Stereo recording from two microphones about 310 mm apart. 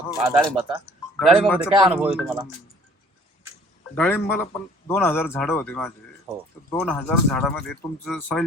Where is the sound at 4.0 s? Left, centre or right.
Centre.